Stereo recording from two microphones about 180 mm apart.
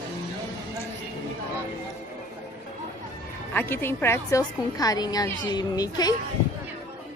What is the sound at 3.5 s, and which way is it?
A woman's voice, 10° left (ahead or behind).